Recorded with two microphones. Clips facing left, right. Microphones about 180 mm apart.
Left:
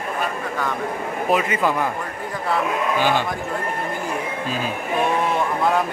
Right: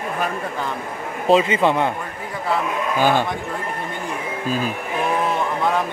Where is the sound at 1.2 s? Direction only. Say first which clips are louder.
Right 5 dB; 25° right (ahead or behind).